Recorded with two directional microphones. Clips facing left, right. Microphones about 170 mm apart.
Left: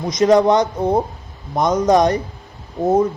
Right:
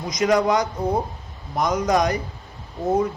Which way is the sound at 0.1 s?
25° left (ahead or behind).